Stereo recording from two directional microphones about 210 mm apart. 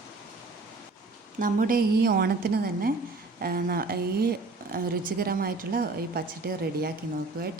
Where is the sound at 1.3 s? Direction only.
40° right (ahead or behind).